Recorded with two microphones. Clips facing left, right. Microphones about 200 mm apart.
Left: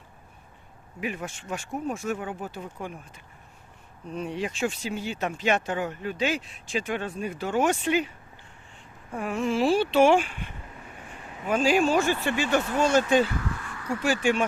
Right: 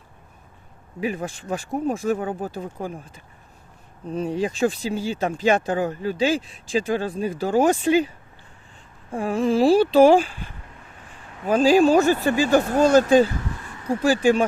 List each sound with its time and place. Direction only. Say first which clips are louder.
1.0 s speech: right 6 dB; 35° right (ahead or behind)
4.1 s speech: right 6 dB; 35° right (ahead or behind)
9.1 s speech: right 6 dB; 30° right (ahead or behind)
13.6 s a sound: even; 20° right (ahead or behind)
13.8 s speech: right 6 dB; 35° right (ahead or behind)